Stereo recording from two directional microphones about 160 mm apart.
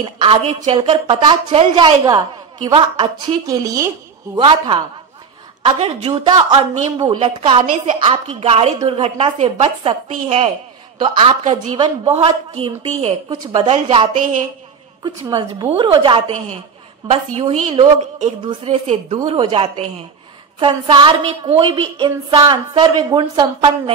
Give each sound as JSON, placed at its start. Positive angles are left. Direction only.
{"t": 0.0, "sound": "a woman's voice", "side_deg": -35}
{"t": 3.4, "sound": "a woman's voice", "side_deg": -20}
{"t": 4.4, "sound": "a woman's voice", "side_deg": -30}
{"t": 6.2, "sound": "a woman's voice", "side_deg": -25}
{"t": 7.6, "sound": "a woman's voice", "side_deg": -50}
{"t": 8.1, "sound": "a woman's voice", "side_deg": -35}
{"t": 15.0, "sound": "a woman's voice", "side_deg": -25}
{"t": 18.7, "sound": "a woman's voice", "side_deg": -45}
{"t": 19.2, "sound": "a woman's voice", "side_deg": -30}